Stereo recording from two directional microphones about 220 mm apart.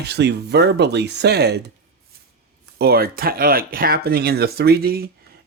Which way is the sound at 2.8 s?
45° right (ahead or behind).